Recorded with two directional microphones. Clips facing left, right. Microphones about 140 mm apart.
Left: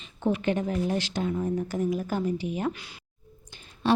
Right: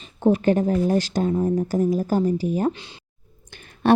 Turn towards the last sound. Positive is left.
turn(degrees=-55)  # may be behind; listen again after turning